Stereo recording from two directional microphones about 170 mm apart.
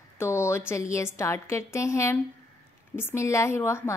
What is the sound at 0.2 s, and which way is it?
A woman's voice, 15° left (ahead or behind).